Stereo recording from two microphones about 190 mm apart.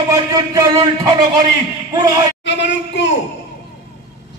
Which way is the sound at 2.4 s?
70° left (ahead or behind).